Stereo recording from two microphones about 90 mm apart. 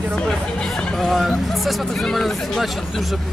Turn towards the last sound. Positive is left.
turn(degrees=0)  # may be behind; listen again after turning